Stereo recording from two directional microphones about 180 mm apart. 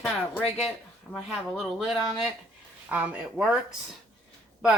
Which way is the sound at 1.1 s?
Centre (ahead or behind).